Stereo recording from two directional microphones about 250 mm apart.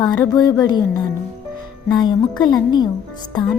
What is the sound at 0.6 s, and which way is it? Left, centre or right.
Speech, centre.